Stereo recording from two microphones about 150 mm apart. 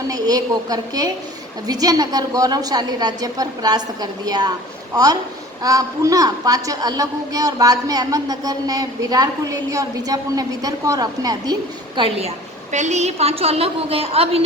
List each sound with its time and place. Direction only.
0.1 s a woman's voice: 25° right (ahead or behind)
5.6 s a woman's voice: 25° right (ahead or behind)
11.9 s a woman's voice: 40° right (ahead or behind)
12.7 s a woman's voice: 50° right (ahead or behind)